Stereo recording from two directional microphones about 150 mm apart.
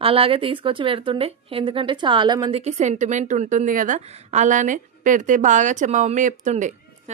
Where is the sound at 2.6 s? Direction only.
50° right (ahead or behind).